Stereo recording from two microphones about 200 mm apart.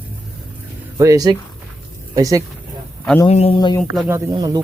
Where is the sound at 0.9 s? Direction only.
15° right (ahead or behind).